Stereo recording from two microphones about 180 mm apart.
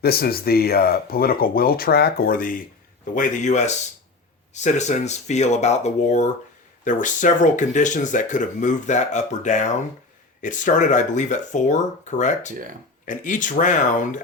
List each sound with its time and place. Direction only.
0.0 s speech: 60° left (ahead or behind)